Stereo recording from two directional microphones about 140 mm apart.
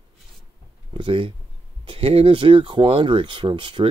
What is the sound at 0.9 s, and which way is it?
Speech, 40° right (ahead or behind).